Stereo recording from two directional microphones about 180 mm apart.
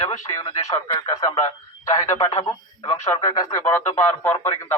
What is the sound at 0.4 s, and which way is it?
Speech, 35° left (ahead or behind).